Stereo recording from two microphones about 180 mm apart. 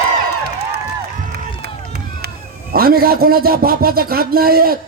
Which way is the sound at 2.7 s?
55° right (ahead or behind).